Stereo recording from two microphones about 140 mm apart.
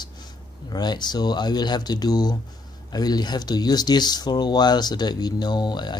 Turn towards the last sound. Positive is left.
turn(degrees=30)  # may be behind; listen again after turning